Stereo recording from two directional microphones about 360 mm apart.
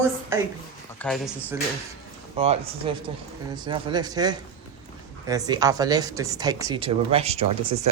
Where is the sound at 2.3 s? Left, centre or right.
Centre.